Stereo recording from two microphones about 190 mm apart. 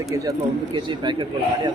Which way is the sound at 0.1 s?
20° right (ahead or behind).